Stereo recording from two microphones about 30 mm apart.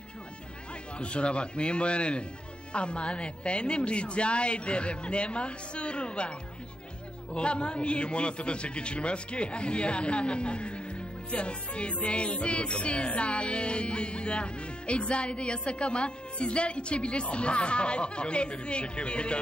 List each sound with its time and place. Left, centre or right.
0.9 s music: left
7.3 s music: left